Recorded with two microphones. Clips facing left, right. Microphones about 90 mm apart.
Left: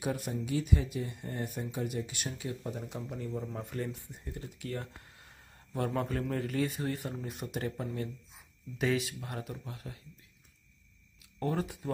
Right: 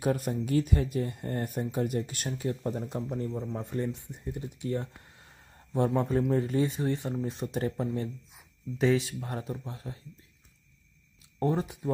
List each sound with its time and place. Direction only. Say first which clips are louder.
0.0 s speech: right 6 dB; 45° right (ahead or behind)
3.7 s speech: right 5 dB; 20° right (ahead or behind)
11.3 s speech: right 4 dB; 25° right (ahead or behind)